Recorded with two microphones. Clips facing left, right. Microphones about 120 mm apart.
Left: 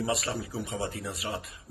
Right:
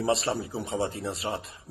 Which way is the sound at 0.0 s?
30° right (ahead or behind).